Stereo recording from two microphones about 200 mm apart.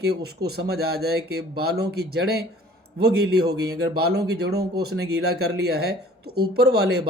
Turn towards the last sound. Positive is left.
turn(degrees=-50)  # may be behind; listen again after turning